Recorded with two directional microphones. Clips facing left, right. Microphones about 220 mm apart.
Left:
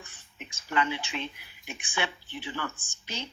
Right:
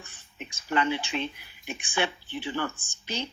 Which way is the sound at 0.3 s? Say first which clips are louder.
Right 2 dB; 35° right (ahead or behind).